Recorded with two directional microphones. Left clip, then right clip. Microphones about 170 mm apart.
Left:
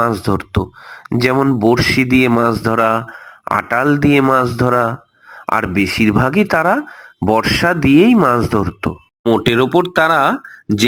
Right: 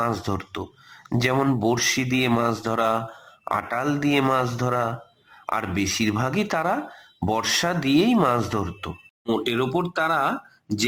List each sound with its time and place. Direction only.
0.0 s speech: 30° left (ahead or behind)